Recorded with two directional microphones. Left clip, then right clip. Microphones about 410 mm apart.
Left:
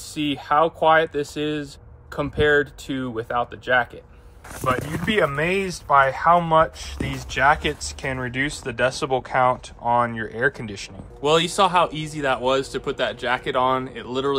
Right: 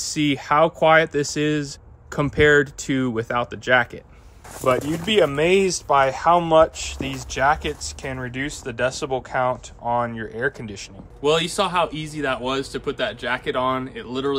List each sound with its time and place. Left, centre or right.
0.0 s speech: right
4.6 s speech: centre
11.2 s speech: centre